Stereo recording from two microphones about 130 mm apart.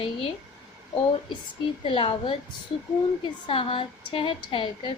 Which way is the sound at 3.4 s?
45° left (ahead or behind).